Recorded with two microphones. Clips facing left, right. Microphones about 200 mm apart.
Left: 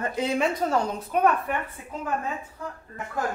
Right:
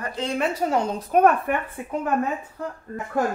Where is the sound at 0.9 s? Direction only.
50° right (ahead or behind).